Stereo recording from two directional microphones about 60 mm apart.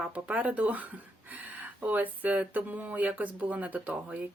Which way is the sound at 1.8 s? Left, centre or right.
Right.